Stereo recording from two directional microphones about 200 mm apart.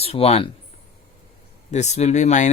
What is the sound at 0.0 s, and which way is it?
Speech, 30° left (ahead or behind).